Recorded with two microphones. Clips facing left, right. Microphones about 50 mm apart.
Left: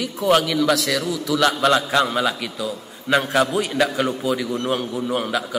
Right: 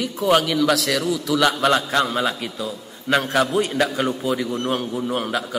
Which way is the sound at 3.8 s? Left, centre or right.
Centre.